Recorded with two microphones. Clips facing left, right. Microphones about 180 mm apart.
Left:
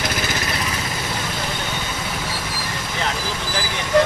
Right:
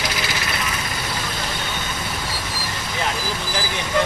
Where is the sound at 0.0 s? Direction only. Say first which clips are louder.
Left 2 dB; 50° left (ahead or behind).